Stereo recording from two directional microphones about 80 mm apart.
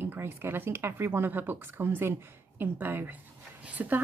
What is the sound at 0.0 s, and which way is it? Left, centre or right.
Speech, right.